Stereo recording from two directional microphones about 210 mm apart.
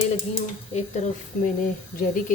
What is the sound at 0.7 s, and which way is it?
Speech, 35° left (ahead or behind).